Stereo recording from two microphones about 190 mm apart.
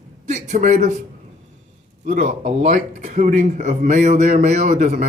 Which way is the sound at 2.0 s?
45° right (ahead or behind).